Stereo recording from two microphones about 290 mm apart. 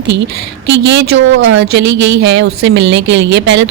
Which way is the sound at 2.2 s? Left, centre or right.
Right.